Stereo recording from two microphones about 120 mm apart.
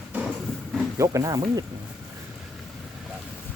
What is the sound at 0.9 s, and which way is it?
Speech, 30° right (ahead or behind).